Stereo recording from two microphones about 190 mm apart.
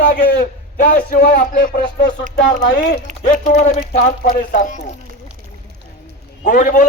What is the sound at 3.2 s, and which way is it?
A man's voice, 45° left (ahead or behind).